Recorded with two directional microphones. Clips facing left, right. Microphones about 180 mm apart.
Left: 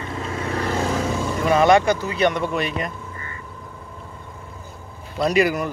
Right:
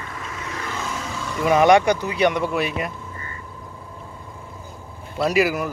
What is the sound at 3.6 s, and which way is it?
Vehicle, 5° right (ahead or behind).